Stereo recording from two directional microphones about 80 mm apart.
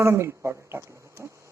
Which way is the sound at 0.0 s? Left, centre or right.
Right.